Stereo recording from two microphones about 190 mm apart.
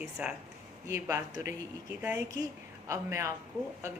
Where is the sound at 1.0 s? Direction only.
15° right (ahead or behind).